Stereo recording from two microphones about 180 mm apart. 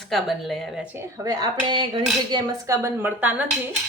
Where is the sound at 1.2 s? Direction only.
25° right (ahead or behind); by 3.5 s 10° right (ahead or behind).